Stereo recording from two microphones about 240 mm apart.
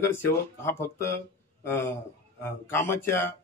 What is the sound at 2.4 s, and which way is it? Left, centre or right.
Speech, centre.